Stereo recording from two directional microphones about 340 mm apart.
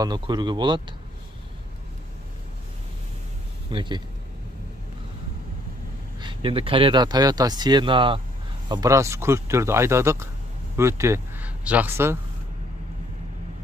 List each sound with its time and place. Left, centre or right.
0.0 s speech: centre
3.7 s speech: centre
6.2 s speech: centre